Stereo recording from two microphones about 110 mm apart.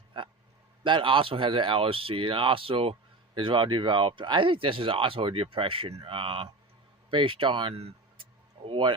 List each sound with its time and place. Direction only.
0.1 s speech: 50° right (ahead or behind)